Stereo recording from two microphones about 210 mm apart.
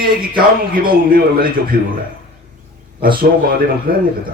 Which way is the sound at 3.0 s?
45° right (ahead or behind).